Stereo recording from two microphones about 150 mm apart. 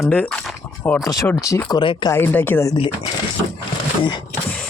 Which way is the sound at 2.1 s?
15° left (ahead or behind).